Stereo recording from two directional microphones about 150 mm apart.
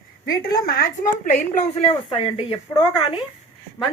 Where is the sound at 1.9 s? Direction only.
35° left (ahead or behind).